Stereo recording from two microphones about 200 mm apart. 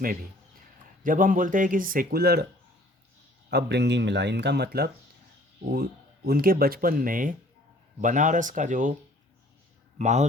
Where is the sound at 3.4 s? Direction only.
55° right (ahead or behind).